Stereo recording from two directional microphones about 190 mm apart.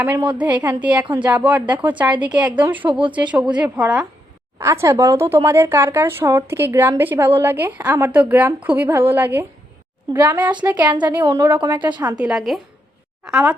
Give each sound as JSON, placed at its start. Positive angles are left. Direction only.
{"t": 0.3, "sound": "speech", "side_deg": -5}
{"t": 11.2, "sound": "a woman's voice", "side_deg": -20}
{"t": 12.2, "sound": "a woman's voice", "side_deg": 0}